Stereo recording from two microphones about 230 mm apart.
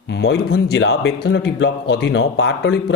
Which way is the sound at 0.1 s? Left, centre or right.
Left.